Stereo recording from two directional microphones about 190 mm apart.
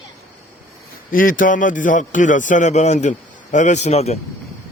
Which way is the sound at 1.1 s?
45° left (ahead or behind).